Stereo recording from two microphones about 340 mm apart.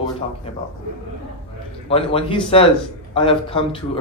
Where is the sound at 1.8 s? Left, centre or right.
Centre.